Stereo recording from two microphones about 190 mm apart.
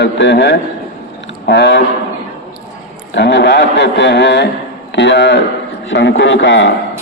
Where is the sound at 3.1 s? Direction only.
65° left (ahead or behind).